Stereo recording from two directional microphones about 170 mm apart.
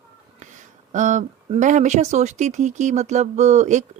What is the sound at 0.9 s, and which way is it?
Speech, 45° right (ahead or behind).